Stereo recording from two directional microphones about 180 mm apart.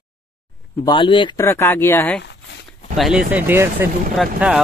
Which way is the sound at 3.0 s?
5° right (ahead or behind).